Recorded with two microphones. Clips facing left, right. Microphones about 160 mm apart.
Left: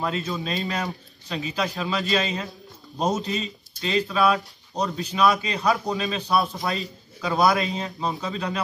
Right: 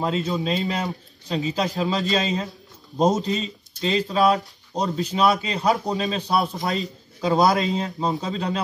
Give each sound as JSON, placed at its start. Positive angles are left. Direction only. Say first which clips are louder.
{"t": 0.0, "sound": "a man's voice", "louder": "right 4 dB", "side_deg": -25}